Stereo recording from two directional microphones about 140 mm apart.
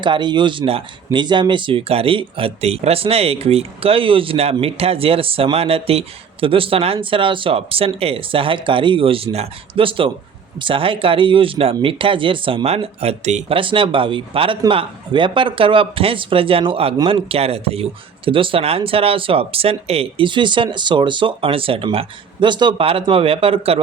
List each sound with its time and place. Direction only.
0.0 s speech: 35° right (ahead or behind)